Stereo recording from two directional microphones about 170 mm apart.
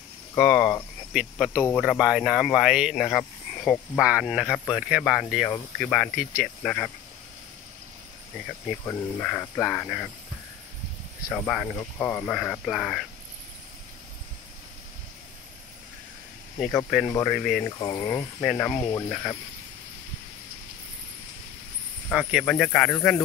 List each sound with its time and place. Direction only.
0.3 s speech: 10° left (ahead or behind)
1.1 s speech: 5° right (ahead or behind)
8.8 s speech: 10° left (ahead or behind)
11.3 s speech: 5° left (ahead or behind)
12.4 s speech: centre (ahead or behind)
16.5 s speech: 5° left (ahead or behind)
17.6 s speech: 20° left (ahead or behind)
18.0 s speech: 5° left (ahead or behind)
18.8 s speech: 20° left (ahead or behind)
19.0 s speech: 5° left (ahead or behind)
22.1 s speech: centre (ahead or behind)